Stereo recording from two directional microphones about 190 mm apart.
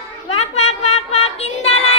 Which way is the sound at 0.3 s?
35° left (ahead or behind).